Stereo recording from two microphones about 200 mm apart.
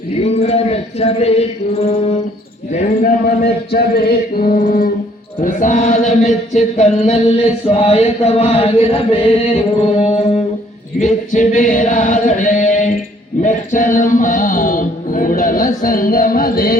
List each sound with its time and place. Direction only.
0.2 s mantra: 30° left (ahead or behind)
2.7 s a sound: 45° left (ahead or behind)
5.4 s chant: 40° left (ahead or behind)
13.4 s music: 40° left (ahead or behind)